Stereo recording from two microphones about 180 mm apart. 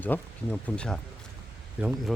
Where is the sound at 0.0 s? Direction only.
10° left (ahead or behind).